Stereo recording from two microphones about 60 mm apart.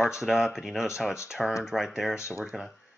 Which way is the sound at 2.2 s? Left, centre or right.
Left.